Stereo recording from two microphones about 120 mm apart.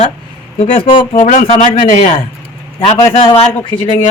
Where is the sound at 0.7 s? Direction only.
90° left.